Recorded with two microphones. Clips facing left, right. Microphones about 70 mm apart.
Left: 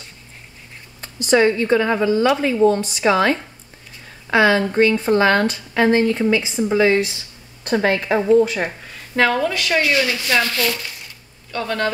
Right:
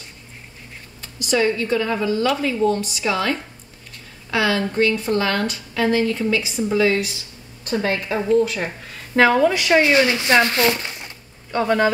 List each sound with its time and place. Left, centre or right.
1.0 s a woman's voice: left
6.0 s a woman's voice: centre
7.6 s a woman's voice: left
8.2 s a woman's voice: centre
8.8 s a sound: centre
9.5 s speech: right
11.5 s a man's voice: centre